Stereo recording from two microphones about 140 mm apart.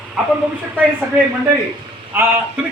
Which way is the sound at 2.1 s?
15° right (ahead or behind).